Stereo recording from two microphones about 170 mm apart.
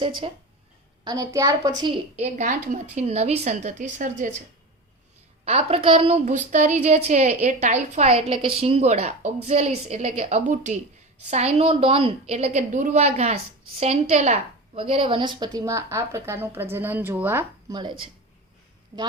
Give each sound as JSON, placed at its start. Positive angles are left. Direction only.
{"t": 0.0, "sound": "a woman's voice", "side_deg": -30}
{"t": 2.1, "sound": "a woman's voice", "side_deg": -45}
{"t": 5.5, "sound": "a woman's voice", "side_deg": -35}
{"t": 17.7, "sound": "a woman's voice", "side_deg": -30}